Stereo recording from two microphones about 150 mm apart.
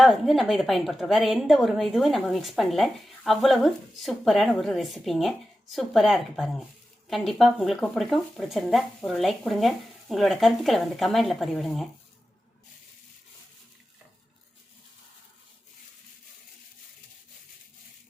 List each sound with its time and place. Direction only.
0.0 s a woman's voice: centre (ahead or behind)